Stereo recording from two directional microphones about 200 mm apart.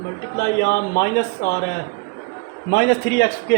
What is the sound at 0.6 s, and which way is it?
Speech, 50° left (ahead or behind).